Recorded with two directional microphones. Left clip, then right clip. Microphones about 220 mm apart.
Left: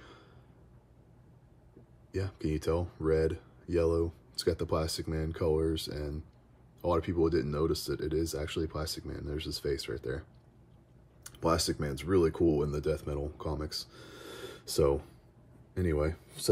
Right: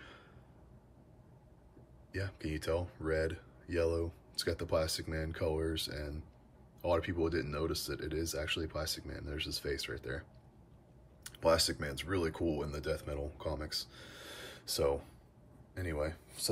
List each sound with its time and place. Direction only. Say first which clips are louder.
2.1 s speech: left 5 dB; 20° left (ahead or behind)
11.2 s a man's voice: even; 20° left (ahead or behind)